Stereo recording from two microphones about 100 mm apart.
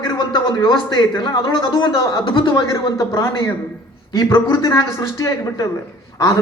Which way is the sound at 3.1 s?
30° left (ahead or behind).